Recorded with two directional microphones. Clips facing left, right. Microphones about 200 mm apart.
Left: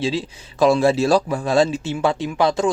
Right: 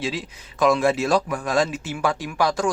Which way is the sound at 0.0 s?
30° left (ahead or behind).